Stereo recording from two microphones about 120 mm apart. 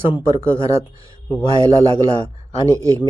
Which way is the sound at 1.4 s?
40° left (ahead or behind).